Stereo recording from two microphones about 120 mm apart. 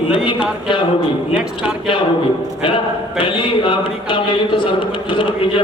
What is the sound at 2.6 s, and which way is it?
A man's voice, 45° left (ahead or behind).